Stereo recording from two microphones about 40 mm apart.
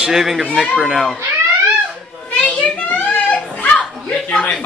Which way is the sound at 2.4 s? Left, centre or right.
Left.